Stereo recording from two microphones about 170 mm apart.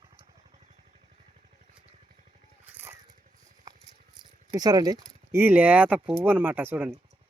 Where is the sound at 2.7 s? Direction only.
15° right (ahead or behind).